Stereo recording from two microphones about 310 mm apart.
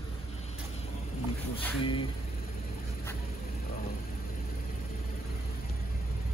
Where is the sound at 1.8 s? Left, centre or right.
Centre.